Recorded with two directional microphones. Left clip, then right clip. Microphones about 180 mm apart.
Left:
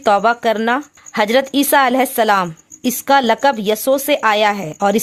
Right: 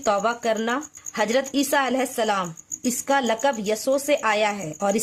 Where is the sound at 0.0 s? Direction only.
35° left (ahead or behind).